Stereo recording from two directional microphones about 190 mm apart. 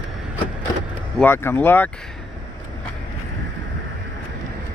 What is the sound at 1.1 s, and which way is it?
Speech, 10° left (ahead or behind).